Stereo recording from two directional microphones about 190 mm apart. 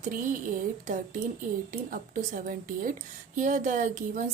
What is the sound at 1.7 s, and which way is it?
Speech, 45° right (ahead or behind).